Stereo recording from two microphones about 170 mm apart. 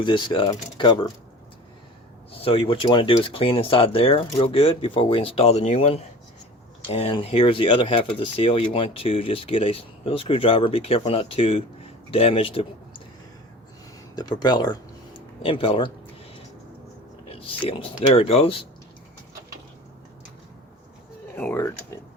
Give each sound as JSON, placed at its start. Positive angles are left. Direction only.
{"t": 0.0, "sound": "speech", "side_deg": 30}
{"t": 2.3, "sound": "speech", "side_deg": 35}
{"t": 14.2, "sound": "speech", "side_deg": 25}
{"t": 17.2, "sound": "speech", "side_deg": 35}
{"t": 21.3, "sound": "speech", "side_deg": 10}